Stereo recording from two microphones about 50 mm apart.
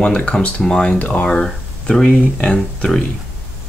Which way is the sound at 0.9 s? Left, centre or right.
Left.